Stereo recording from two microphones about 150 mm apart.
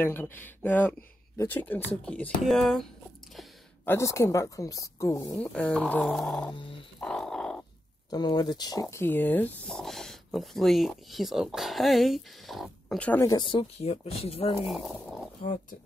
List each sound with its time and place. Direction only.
0.0 s speech: 15° left (ahead or behind)
3.8 s speech: 15° left (ahead or behind)
5.4 s speech: 5° left (ahead or behind)
6.5 s speech: 35° left (ahead or behind)
7.0 s frog: 5° left (ahead or behind)
8.1 s speech: 25° left (ahead or behind)
8.9 s speech: 15° left (ahead or behind)
13.2 s speech: 25° left (ahead or behind)
14.7 s speech: centre (ahead or behind)